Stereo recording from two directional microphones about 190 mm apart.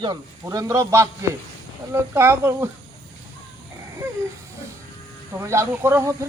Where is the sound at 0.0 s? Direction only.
20° right (ahead or behind).